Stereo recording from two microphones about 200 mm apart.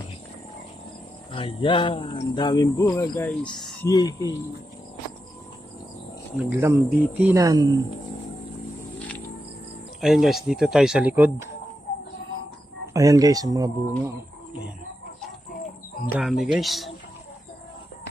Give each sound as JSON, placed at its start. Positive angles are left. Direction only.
{"t": 1.3, "sound": "speech", "side_deg": 25}
{"t": 3.8, "sound": "speech", "side_deg": 15}
{"t": 6.5, "sound": "speech", "side_deg": -10}
{"t": 9.0, "sound": "music", "side_deg": 5}
{"t": 10.0, "sound": "speech", "side_deg": 0}
{"t": 12.9, "sound": "speech", "side_deg": -15}
{"t": 16.1, "sound": "speech", "side_deg": 0}